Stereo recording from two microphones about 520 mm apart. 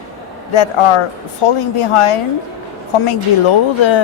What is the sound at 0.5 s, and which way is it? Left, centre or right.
Speech, left.